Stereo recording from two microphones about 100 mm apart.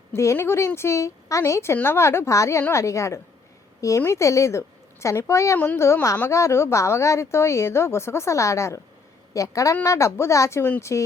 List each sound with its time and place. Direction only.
0.1 s a woman's voice: 25° left (ahead or behind)